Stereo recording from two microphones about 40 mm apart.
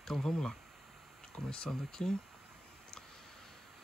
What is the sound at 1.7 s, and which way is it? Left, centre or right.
Speech, centre.